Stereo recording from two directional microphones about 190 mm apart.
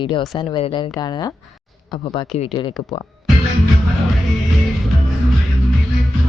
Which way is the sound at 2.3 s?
30° left (ahead or behind).